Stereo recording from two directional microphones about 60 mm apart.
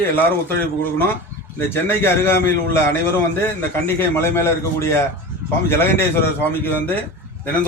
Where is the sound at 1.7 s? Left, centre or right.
Left.